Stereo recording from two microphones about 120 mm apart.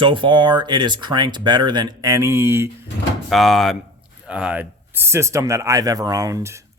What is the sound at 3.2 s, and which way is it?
Speech, centre (ahead or behind).